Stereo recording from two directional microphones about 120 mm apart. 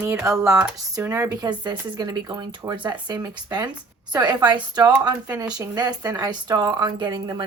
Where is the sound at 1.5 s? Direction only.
35° right (ahead or behind).